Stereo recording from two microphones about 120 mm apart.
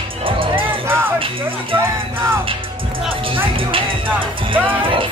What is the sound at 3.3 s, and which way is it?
Speech, 45° right (ahead or behind).